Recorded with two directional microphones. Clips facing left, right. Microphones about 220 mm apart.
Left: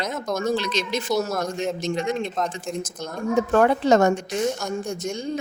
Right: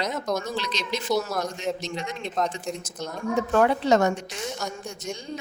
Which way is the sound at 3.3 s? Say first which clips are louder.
Left 3 dB; 45° left (ahead or behind).